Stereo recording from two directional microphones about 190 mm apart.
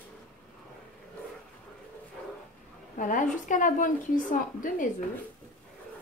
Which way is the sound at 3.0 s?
45° left (ahead or behind).